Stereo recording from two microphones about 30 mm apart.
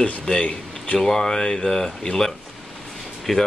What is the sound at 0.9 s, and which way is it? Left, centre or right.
Speech, centre.